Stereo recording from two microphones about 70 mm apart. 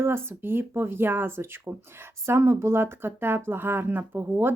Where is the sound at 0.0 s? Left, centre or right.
Right.